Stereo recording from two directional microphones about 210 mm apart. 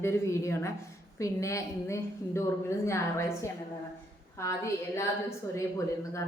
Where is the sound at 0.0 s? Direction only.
15° left (ahead or behind).